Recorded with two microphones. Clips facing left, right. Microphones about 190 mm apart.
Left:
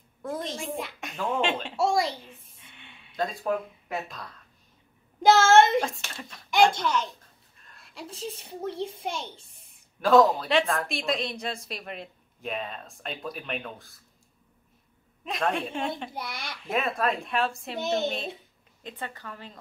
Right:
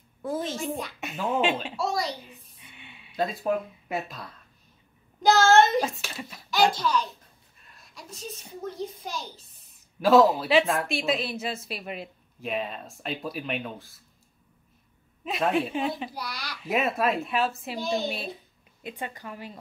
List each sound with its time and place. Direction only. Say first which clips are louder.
0.2 s a woman's voice: right 3 dB; 5° right (ahead or behind)
1.8 s a child's voice: left 4 dB; 25° left (ahead or behind)
2.2 s a sound: even; 5° right (ahead or behind)
5.2 s a child's voice: left 1 dB; 25° left (ahead or behind)
5.8 s speech: right 1 dB; 5° right (ahead or behind)
6.5 s a child's voice: left 1 dB; 25° left (ahead or behind)
9.9 s speech: right 1 dB; 5° right (ahead or behind)
15.2 s speech: right 3 dB; 5° right (ahead or behind)
16.1 s a child's voice: even; 25° left (ahead or behind)
16.6 s a woman's voice: right 2 dB; 5° right (ahead or behind)